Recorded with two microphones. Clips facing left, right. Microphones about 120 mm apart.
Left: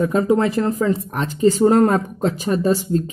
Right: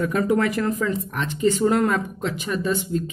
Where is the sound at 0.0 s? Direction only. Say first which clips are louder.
Left 4 dB; 30° left (ahead or behind).